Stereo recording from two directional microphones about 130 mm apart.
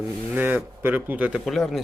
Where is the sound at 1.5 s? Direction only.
Centre (ahead or behind).